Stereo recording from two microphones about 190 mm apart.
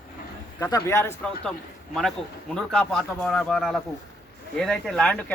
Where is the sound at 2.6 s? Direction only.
5° left (ahead or behind).